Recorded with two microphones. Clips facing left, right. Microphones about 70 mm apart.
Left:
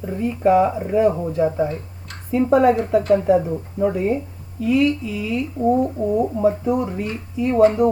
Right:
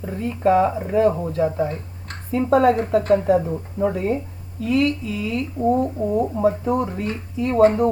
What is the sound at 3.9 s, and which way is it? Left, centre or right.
Speech, left.